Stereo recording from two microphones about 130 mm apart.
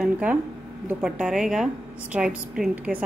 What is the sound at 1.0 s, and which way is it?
A woman's voice, 5° right (ahead or behind).